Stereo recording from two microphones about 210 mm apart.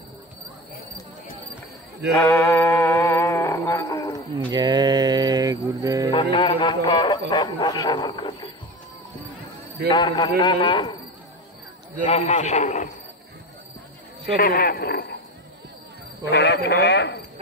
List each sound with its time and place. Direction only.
2.1 s music: 10° left (ahead or behind)
4.5 s a sound: 20° right (ahead or behind)
6.3 s a sound: 25° left (ahead or behind)
9.9 s a man's voice: 20° left (ahead or behind)
12.1 s a man's voice: 35° left (ahead or behind)
14.3 s a man's voice: 45° left (ahead or behind)
16.3 s a man's voice: 55° left (ahead or behind)